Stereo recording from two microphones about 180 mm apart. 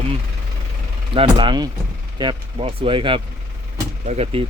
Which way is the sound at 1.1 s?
30° right (ahead or behind).